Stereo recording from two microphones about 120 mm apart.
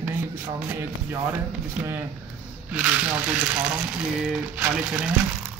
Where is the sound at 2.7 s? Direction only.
10° right (ahead or behind).